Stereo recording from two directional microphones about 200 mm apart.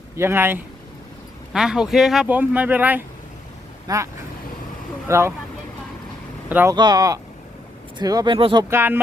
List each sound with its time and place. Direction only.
0.2 s speech: 10° right (ahead or behind)
6.5 s speech: 10° right (ahead or behind); by 8.6 s 25° right (ahead or behind)
8.7 s speech: 10° right (ahead or behind)